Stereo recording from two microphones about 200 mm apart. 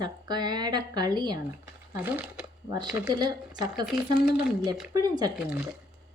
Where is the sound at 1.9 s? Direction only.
10° right (ahead or behind).